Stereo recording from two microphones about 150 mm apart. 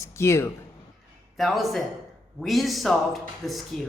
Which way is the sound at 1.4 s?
Centre (ahead or behind).